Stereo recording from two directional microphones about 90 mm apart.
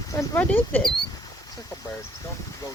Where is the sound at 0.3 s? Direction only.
20° left (ahead or behind).